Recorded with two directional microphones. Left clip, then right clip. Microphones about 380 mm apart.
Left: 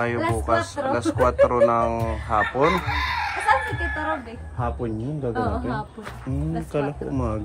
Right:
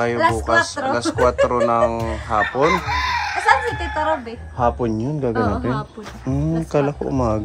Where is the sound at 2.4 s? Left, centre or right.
Centre.